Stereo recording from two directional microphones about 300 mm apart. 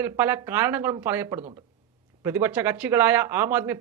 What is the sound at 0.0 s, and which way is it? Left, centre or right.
A man's voice, centre.